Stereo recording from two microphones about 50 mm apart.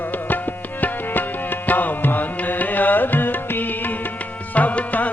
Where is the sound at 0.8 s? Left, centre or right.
Left.